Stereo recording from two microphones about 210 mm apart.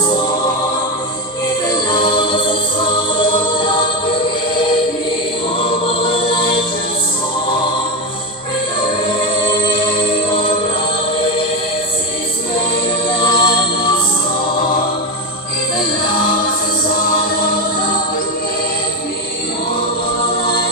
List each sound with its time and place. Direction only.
1.9 s choir: 20° left (ahead or behind)
5.5 s music: 25° left (ahead or behind)
9.4 s music: 25° left (ahead or behind)
13.1 s music: 25° left (ahead or behind)